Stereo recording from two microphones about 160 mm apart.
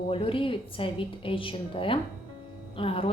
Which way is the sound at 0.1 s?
35° left (ahead or behind).